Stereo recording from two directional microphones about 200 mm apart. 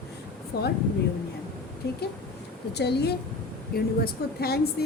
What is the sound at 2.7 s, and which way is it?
A woman's voice, 55° left (ahead or behind).